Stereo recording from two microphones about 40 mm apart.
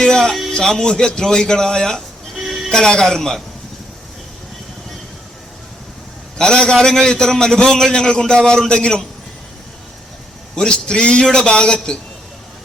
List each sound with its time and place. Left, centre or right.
0.0 s music: centre
0.6 s a man's voice: centre
6.3 s a man's voice: centre
10.5 s a man's voice: left